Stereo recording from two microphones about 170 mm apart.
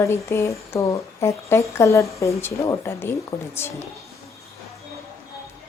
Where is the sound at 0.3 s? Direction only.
15° left (ahead or behind).